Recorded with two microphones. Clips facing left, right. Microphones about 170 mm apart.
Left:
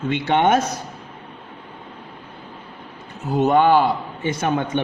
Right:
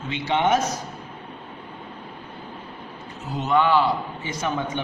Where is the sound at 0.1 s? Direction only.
55° left (ahead or behind).